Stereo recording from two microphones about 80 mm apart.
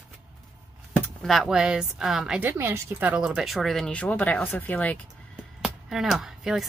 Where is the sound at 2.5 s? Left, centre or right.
Right.